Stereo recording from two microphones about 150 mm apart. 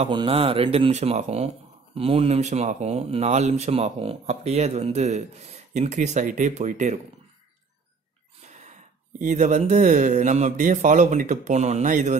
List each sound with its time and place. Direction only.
0.1 s speech: 35° right (ahead or behind); by 7.0 s 55° right (ahead or behind)
8.5 s a sound: 50° right (ahead or behind)
9.2 s speech: 55° right (ahead or behind)